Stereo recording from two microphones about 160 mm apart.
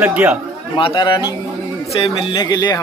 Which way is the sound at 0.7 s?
30° left (ahead or behind).